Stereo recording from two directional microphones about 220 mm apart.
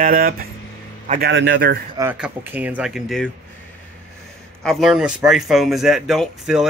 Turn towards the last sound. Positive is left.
turn(degrees=0)  # may be behind; listen again after turning